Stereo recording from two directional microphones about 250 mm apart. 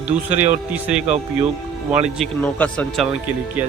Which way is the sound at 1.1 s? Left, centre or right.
Right.